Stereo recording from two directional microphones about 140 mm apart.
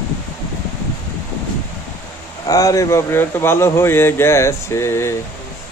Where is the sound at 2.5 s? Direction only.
25° left (ahead or behind).